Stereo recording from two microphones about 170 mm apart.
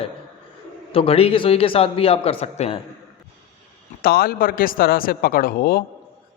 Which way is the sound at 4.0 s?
60° left (ahead or behind).